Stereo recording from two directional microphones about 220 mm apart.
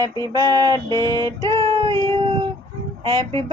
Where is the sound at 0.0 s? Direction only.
20° right (ahead or behind).